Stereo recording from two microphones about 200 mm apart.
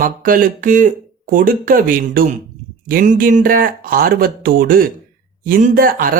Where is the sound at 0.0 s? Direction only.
45° right (ahead or behind).